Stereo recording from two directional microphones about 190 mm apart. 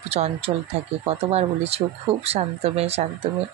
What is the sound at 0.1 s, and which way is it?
Speech, 35° right (ahead or behind).